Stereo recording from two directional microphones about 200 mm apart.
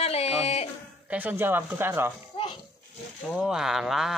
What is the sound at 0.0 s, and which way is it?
Dog, 30° left (ahead or behind).